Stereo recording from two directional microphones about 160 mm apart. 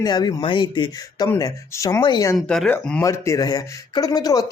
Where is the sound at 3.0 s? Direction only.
20° left (ahead or behind).